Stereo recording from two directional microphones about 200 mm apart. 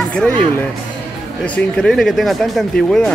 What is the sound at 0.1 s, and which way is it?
Speech, 5° left (ahead or behind).